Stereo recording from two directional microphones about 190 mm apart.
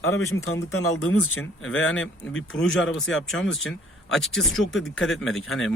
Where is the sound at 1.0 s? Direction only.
90° left.